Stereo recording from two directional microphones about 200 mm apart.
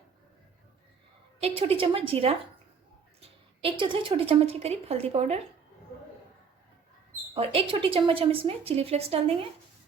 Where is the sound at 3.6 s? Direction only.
25° right (ahead or behind).